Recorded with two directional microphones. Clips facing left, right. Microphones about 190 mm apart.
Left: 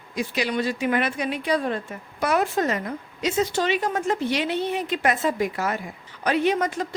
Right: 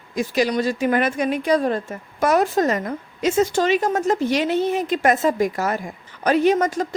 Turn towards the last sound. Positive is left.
turn(degrees=-45)  # may be behind; listen again after turning